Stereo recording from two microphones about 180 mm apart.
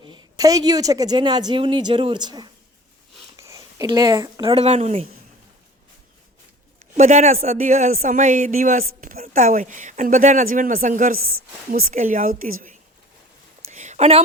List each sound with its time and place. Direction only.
0.0 s speech: 25° right (ahead or behind)
6.7 s speech: 45° right (ahead or behind)
13.7 s a sound: 40° right (ahead or behind)